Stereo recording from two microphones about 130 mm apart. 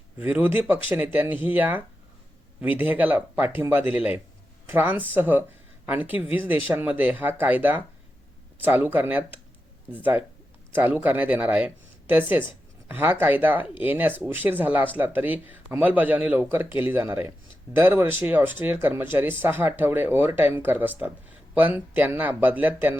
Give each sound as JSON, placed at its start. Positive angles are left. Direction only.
{"t": 0.2, "sound": "speech", "side_deg": -15}